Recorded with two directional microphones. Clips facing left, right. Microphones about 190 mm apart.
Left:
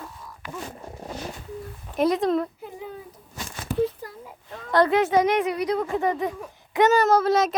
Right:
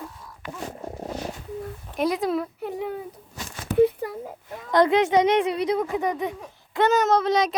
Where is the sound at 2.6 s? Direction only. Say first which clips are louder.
Right 7 dB; 70° right (ahead or behind).